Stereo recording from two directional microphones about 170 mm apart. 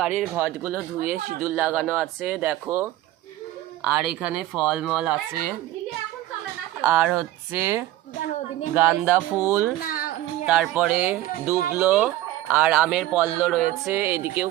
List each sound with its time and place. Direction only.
0.2 s speech: 10° right (ahead or behind)
6.8 s speech: 10° right (ahead or behind)
9.8 s music: 55° left (ahead or behind)
10.4 s speech: 5° right (ahead or behind)